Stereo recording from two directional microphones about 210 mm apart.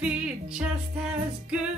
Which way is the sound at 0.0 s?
5° right (ahead or behind).